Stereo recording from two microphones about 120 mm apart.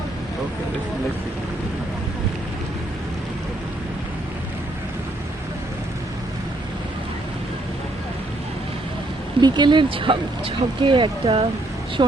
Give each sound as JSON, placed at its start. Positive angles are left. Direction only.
{"t": 9.4, "sound": "speech", "side_deg": -40}